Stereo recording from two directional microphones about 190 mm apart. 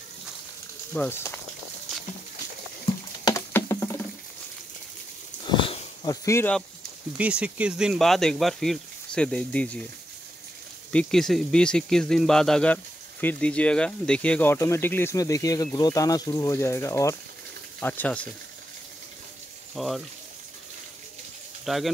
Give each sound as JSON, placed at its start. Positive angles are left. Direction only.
{"t": 0.9, "sound": "speech", "side_deg": 10}
{"t": 3.3, "sound": "a sound", "side_deg": 15}
{"t": 5.4, "sound": "wheeze", "side_deg": 25}
{"t": 6.2, "sound": "speech", "side_deg": 10}
{"t": 7.2, "sound": "speech", "side_deg": -5}
{"t": 10.9, "sound": "speech", "side_deg": 5}
{"t": 19.7, "sound": "speech", "side_deg": 0}
{"t": 21.6, "sound": "speech", "side_deg": 0}